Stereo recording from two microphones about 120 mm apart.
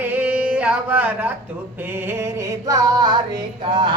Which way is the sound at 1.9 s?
20° right (ahead or behind).